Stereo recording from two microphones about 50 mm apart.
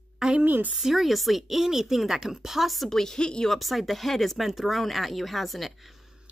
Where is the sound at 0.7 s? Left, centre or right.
Centre.